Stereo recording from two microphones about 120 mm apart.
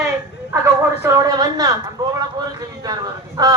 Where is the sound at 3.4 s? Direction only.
30° right (ahead or behind).